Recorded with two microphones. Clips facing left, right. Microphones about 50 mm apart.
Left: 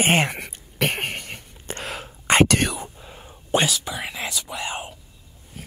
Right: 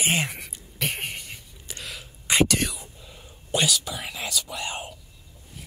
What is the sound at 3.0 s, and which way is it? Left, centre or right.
Whispering, left.